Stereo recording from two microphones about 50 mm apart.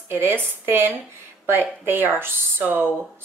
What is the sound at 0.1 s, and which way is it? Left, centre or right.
Speech, right.